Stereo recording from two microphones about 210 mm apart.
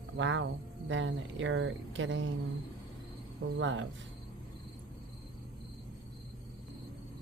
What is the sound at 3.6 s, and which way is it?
Speech, 65° right (ahead or behind).